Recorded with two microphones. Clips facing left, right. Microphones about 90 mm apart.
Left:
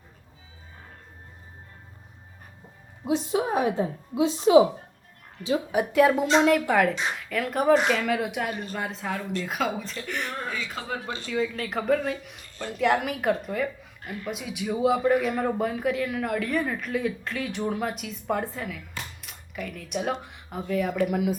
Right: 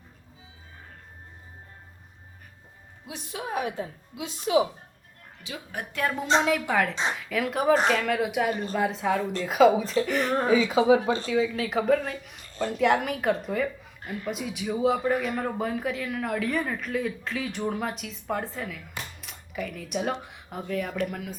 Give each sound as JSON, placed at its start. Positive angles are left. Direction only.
{"t": 3.1, "sound": "a woman's voice", "side_deg": 30}
{"t": 5.7, "sound": "a woman's voice", "side_deg": 5}